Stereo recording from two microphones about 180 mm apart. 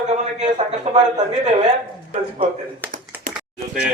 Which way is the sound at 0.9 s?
40° right (ahead or behind).